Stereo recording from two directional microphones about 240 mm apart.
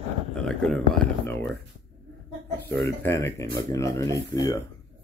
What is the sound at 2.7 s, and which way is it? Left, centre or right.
Speech, centre.